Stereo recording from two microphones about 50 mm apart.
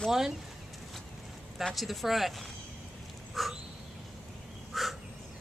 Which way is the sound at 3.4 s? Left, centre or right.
Centre.